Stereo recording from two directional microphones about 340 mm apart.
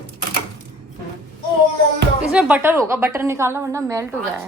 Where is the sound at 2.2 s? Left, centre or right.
Centre.